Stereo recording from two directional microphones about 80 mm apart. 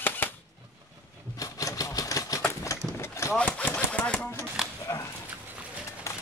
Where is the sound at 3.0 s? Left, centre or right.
Left.